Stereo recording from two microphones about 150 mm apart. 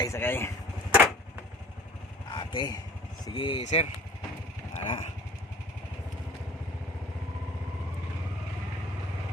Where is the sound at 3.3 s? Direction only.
35° left (ahead or behind).